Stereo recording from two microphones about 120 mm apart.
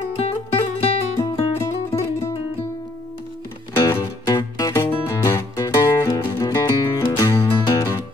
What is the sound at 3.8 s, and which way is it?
Music, 25° left (ahead or behind).